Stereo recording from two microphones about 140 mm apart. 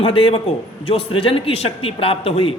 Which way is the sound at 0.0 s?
40° left (ahead or behind).